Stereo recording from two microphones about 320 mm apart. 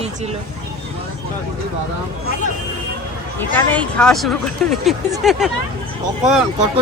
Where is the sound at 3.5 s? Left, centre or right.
Centre.